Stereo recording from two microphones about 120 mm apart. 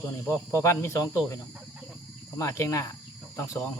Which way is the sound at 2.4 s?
25° left (ahead or behind).